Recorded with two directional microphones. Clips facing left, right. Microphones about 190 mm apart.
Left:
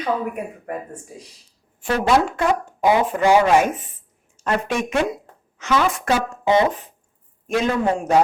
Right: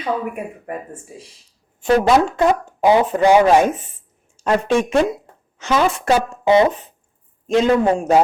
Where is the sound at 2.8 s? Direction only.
25° right (ahead or behind).